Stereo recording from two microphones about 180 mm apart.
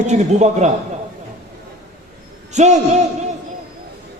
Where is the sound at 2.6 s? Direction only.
40° right (ahead or behind).